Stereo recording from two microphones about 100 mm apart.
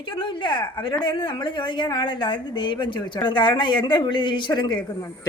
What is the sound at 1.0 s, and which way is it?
A woman's voice, 50° left (ahead or behind).